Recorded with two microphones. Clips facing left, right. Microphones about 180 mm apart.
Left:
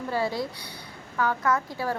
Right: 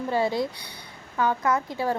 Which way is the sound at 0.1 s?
20° right (ahead or behind).